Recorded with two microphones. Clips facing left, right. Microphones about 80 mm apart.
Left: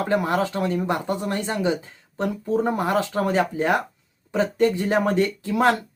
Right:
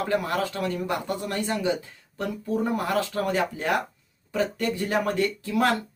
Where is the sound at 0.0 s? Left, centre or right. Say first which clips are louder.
Left 4 dB; left.